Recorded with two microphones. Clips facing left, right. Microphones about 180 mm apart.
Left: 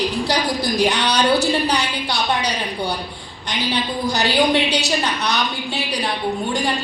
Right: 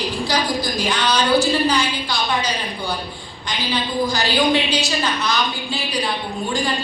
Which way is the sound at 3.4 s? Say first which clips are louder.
Left 1 dB; 70° left (ahead or behind).